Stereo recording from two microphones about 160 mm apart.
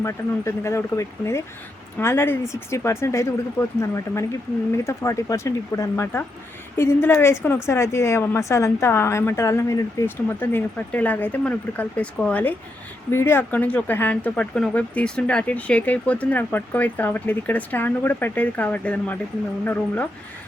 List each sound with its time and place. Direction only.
0.0 s speech: 15° left (ahead or behind)